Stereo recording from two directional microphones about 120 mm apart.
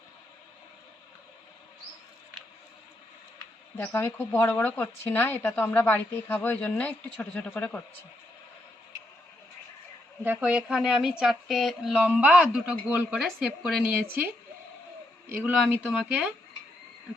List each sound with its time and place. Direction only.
3.8 s speech: 20° left (ahead or behind)
10.2 s speech: 10° right (ahead or behind)
11.9 s a man's voice: 10° right (ahead or behind)
13.1 s speech: centre (ahead or behind)
13.8 s a man's voice: 10° right (ahead or behind)
15.9 s a man's voice: 10° right (ahead or behind)